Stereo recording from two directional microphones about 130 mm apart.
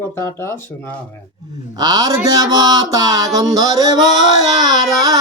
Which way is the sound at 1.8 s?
30° right (ahead or behind).